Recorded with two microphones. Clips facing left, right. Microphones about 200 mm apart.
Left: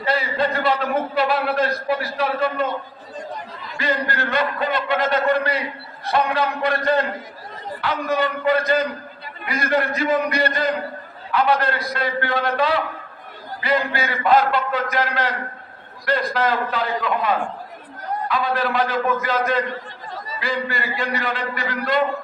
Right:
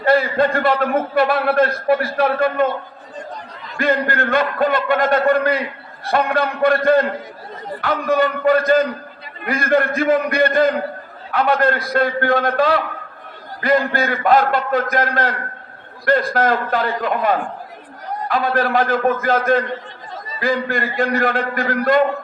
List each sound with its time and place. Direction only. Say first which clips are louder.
0.0 s a man's voice: right 6 dB; 50° right (ahead or behind)
3.8 s a man's voice: right 5 dB; 50° right (ahead or behind)